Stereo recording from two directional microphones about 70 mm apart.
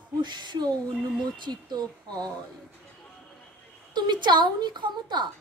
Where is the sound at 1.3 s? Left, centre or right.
Right.